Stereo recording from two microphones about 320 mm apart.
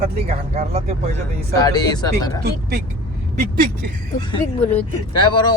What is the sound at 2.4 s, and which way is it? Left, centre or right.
Speech, right.